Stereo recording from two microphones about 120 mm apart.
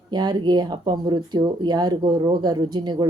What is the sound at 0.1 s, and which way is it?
A woman's voice, 35° right (ahead or behind).